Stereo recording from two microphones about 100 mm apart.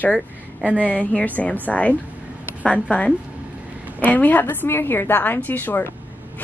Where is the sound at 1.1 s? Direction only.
15° left (ahead or behind).